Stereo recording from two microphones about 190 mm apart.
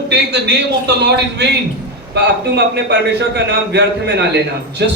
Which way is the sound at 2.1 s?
60° right (ahead or behind).